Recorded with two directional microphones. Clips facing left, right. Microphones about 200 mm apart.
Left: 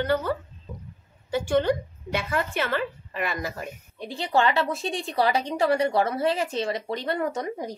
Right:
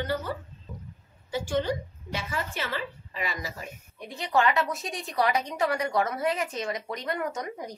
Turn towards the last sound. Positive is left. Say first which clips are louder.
# left 4 dB
turn(degrees=30)  # may be behind; listen again after turning